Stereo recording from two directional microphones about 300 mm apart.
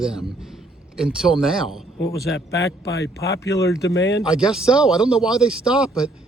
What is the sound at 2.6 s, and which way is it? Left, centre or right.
A man's voice, left.